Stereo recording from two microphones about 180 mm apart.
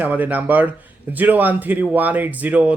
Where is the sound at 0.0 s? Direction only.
10° right (ahead or behind).